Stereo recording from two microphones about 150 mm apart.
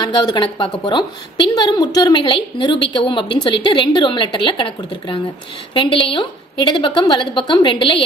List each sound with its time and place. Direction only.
0.0 s a woman's voice: 30° left (ahead or behind)